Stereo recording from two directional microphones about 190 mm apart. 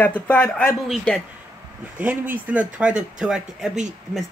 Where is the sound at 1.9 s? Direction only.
10° right (ahead or behind).